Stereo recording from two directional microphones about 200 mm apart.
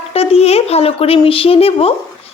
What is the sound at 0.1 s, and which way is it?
Speech, 30° left (ahead or behind).